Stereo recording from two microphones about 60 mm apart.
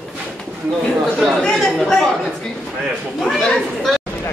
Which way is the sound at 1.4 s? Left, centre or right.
Centre.